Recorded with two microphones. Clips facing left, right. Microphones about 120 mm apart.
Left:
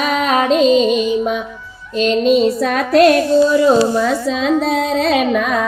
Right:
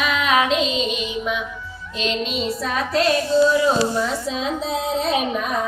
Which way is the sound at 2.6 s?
65° left (ahead or behind).